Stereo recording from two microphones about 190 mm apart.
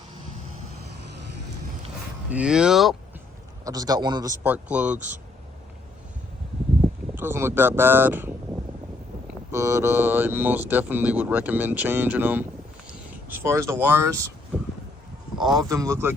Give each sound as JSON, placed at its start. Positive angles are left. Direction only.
{"t": 2.3, "sound": "speech", "side_deg": -5}
{"t": 3.6, "sound": "a man's voice", "side_deg": -20}
{"t": 4.4, "sound": "speech", "side_deg": -10}
{"t": 7.2, "sound": "speech", "side_deg": -10}
{"t": 15.6, "sound": "speech", "side_deg": -15}